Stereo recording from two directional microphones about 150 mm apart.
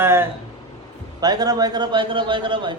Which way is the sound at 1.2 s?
25° right (ahead or behind).